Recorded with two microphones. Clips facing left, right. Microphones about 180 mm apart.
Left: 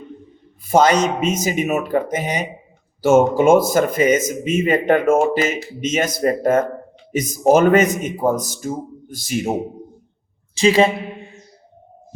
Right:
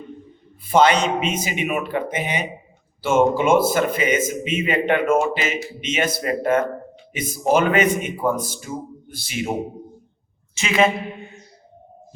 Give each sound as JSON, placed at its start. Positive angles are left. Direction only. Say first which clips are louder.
{"t": 0.7, "sound": "a man's voice", "louder": "left 2 dB", "side_deg": 40}
{"t": 10.5, "sound": "a man's voice", "louder": "left 5 dB", "side_deg": 35}